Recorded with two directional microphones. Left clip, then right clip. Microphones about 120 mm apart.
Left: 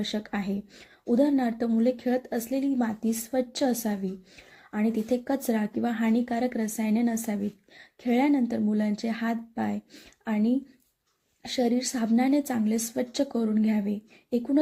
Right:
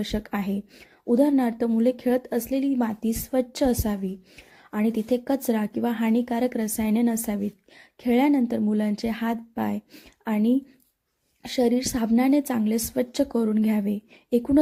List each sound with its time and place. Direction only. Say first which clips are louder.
0.0 s speech: right 2 dB; 30° right (ahead or behind)